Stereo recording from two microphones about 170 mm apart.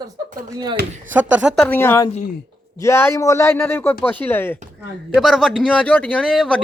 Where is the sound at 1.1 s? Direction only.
10° right (ahead or behind).